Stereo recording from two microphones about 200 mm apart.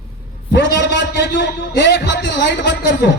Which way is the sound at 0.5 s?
60° left (ahead or behind).